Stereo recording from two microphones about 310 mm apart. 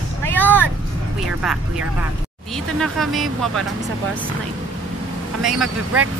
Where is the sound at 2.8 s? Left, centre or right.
Centre.